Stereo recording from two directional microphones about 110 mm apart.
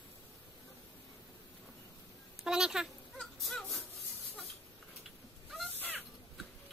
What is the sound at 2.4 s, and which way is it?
Speech, 5° right (ahead or behind).